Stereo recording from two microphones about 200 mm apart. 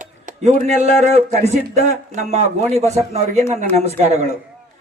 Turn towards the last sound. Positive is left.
turn(degrees=-35)  # may be behind; listen again after turning